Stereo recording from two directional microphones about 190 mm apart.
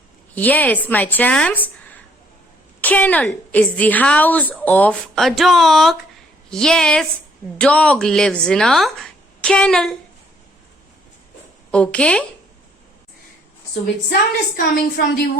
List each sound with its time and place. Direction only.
0.3 s a woman's voice: 10° left (ahead or behind)
2.8 s a woman's voice: 10° left (ahead or behind)
11.7 s speech: 5° left (ahead or behind)
14.1 s a woman's voice: 55° left (ahead or behind)